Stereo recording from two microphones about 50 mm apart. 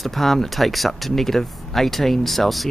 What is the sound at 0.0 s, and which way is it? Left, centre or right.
Speech, centre.